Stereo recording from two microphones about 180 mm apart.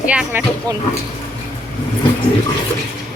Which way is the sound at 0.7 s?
20° right (ahead or behind).